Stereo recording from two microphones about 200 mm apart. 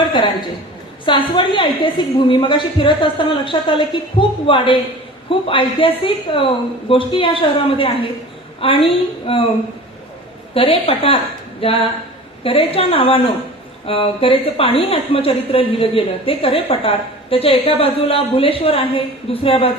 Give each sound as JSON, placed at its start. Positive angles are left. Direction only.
{"t": 1.0, "sound": "a woman's voice", "side_deg": 25}
{"t": 10.5, "sound": "a woman's voice", "side_deg": 30}